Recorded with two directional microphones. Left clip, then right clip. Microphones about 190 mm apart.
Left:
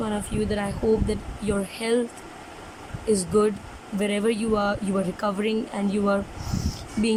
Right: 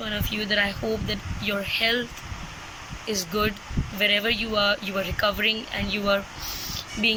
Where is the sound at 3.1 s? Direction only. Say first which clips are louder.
Left 5 dB; 25° left (ahead or behind).